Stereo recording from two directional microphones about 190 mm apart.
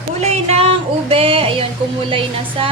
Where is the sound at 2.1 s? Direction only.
30° right (ahead or behind).